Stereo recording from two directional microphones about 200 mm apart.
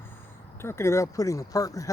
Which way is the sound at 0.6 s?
15° left (ahead or behind).